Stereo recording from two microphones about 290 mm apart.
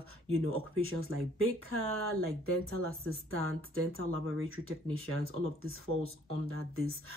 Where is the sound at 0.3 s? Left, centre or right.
Right.